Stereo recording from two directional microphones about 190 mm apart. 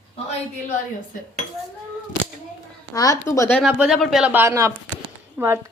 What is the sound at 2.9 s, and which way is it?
Speech, 20° left (ahead or behind).